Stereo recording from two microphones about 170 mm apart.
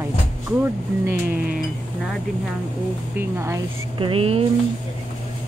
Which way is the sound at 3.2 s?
15° right (ahead or behind).